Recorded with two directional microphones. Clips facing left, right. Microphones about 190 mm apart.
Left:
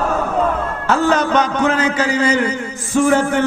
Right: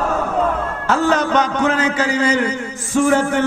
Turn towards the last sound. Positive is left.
turn(degrees=15)  # may be behind; listen again after turning